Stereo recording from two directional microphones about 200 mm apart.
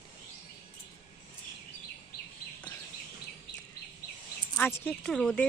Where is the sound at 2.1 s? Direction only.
50° left (ahead or behind).